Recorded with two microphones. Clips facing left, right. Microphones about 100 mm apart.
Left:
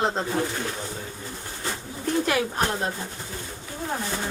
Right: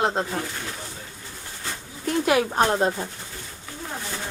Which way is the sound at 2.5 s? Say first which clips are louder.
Right 5 dB; 30° right (ahead or behind).